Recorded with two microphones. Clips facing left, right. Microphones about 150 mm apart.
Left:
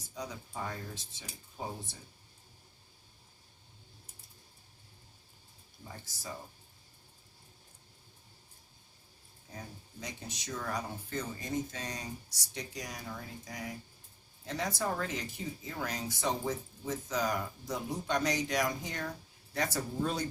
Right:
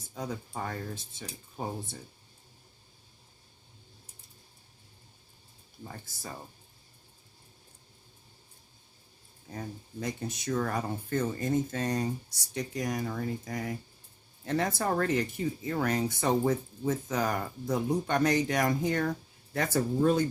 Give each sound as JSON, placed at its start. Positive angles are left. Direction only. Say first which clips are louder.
{"t": 0.1, "sound": "speech", "louder": "right 5 dB", "side_deg": -55}
{"t": 5.8, "sound": "speech", "louder": "right 3 dB", "side_deg": -55}
{"t": 10.0, "sound": "speech", "louder": "right 9 dB", "side_deg": -55}